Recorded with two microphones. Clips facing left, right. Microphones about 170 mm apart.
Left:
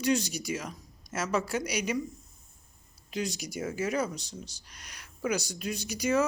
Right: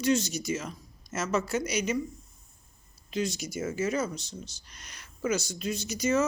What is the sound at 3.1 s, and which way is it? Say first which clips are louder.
Speech: right 3 dB; 15° left (ahead or behind).